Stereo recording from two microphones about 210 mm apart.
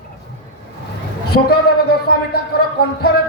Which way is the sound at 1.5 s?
50° left (ahead or behind).